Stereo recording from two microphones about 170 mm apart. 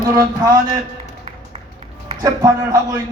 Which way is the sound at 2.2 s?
20° right (ahead or behind).